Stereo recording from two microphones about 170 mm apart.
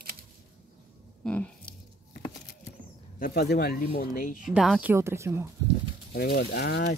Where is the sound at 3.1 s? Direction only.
60° left (ahead or behind).